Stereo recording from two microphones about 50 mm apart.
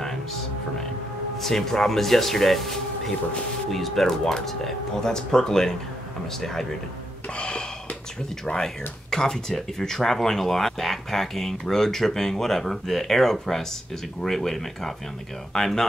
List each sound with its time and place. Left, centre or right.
0.0 s music: centre
1.4 s speech: centre
7.3 s gasp: centre
8.5 s speech: centre